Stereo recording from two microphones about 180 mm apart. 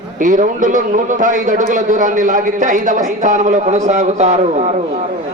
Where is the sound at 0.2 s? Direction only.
45° right (ahead or behind).